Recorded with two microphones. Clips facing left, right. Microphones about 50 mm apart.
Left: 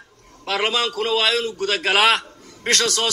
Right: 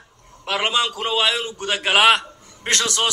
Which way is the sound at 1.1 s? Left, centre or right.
Left.